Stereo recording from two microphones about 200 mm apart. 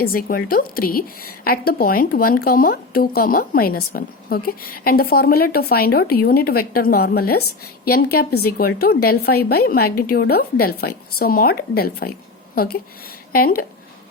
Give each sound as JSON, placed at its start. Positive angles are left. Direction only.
{"t": 0.0, "sound": "a woman's voice", "side_deg": 45}